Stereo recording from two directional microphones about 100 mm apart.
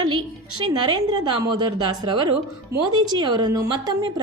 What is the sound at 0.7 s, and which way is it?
A woman's voice, 45° right (ahead or behind).